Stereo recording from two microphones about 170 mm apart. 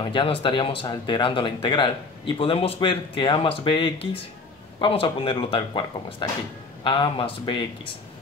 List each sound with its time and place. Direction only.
0.0 s a man's voice: 30° left (ahead or behind)